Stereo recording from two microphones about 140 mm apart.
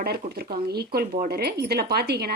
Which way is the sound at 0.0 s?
90° right.